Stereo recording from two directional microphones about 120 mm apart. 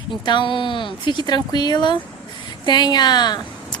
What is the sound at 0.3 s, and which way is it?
A woman's voice, 40° left (ahead or behind).